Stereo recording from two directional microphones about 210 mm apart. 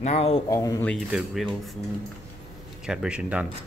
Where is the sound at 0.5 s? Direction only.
15° left (ahead or behind).